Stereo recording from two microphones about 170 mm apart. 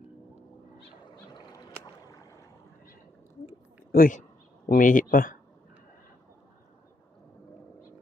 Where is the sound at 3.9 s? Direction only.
50° left (ahead or behind).